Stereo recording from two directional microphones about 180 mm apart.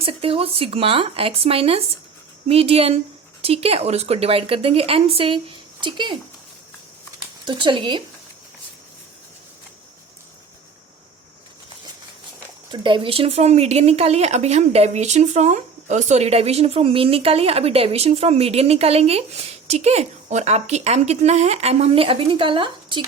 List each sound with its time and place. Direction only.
0.0 s speech: 30° right (ahead or behind)
7.4 s speech: 25° right (ahead or behind)
12.7 s speech: 25° right (ahead or behind)